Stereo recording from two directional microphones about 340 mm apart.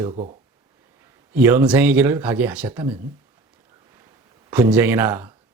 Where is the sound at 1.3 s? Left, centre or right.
Centre.